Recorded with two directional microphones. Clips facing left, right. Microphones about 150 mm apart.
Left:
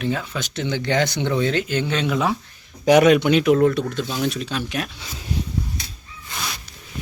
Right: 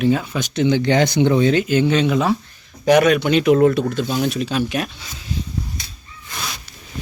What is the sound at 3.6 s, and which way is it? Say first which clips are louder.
Speech: right 3 dB; 10° right (ahead or behind).